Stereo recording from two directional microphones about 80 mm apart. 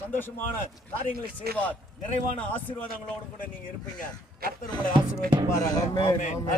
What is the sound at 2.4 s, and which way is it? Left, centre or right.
Speech, left.